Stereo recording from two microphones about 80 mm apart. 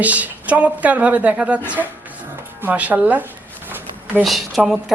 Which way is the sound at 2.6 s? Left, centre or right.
Centre.